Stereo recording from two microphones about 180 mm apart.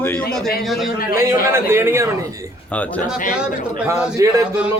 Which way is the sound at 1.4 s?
15° right (ahead or behind).